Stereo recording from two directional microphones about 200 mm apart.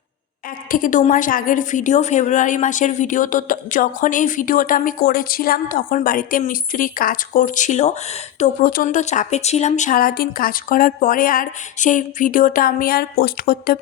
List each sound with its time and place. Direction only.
0.7 s a woman's voice: 40° left (ahead or behind)